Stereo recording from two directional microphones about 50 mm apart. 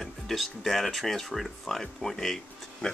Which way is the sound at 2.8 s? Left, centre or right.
Centre.